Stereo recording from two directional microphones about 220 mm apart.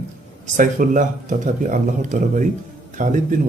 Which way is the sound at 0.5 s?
35° right (ahead or behind).